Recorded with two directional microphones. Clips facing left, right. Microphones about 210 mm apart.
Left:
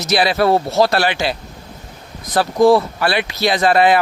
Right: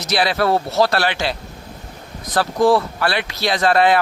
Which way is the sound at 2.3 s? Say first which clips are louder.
Left 3 dB; 10° left (ahead or behind).